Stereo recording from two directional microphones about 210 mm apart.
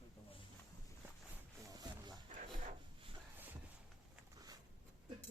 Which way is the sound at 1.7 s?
15° right (ahead or behind).